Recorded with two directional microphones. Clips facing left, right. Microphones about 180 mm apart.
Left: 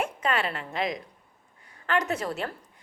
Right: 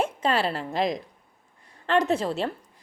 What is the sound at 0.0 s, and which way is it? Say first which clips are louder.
A woman's voice: right 3 dB; 30° right (ahead or behind).